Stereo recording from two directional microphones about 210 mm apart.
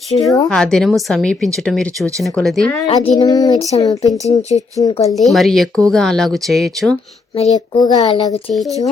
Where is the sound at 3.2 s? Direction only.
15° left (ahead or behind).